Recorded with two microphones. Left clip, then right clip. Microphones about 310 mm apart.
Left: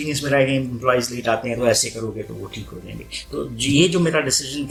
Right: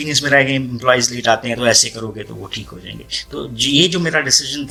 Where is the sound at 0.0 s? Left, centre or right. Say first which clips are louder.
Right 5 dB; right.